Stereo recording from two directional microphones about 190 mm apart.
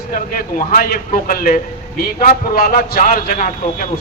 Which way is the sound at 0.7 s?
50° left (ahead or behind).